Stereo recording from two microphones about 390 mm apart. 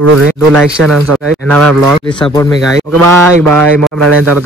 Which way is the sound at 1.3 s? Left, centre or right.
Centre.